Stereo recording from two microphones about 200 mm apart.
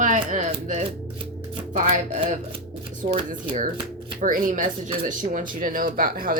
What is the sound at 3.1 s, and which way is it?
Speech, 40° right (ahead or behind).